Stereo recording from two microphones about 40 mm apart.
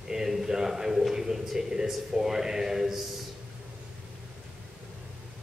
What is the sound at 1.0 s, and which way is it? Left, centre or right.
A man's voice, centre.